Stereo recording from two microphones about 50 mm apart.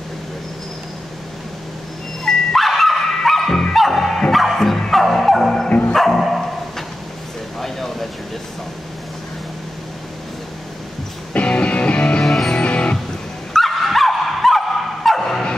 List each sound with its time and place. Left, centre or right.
2.2 s dog: centre
3.7 s music: centre
4.3 s bow-wow: centre
5.7 s dog: left
5.9 s dog: centre
7.6 s a sound: centre
11.3 s music: left
12.2 s music: centre
12.5 s music: left
13.5 s dog: centre
15.0 s a sound: centre